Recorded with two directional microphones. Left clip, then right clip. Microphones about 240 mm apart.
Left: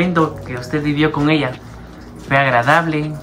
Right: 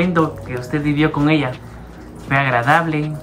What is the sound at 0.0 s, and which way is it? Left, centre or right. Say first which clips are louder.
Speech: left 1 dB; centre.